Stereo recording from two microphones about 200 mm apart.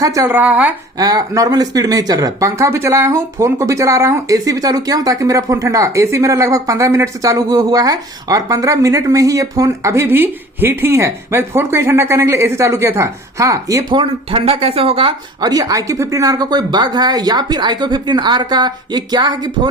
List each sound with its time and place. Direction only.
0.0 s speech: 15° right (ahead or behind)
0.9 s speech: 20° right (ahead or behind)